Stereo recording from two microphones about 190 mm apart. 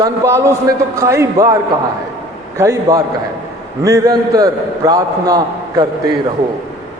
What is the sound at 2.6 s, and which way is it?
A man's voice, 15° right (ahead or behind).